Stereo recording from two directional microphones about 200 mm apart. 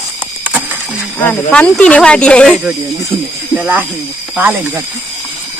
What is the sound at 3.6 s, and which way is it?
Speech, 10° right (ahead or behind).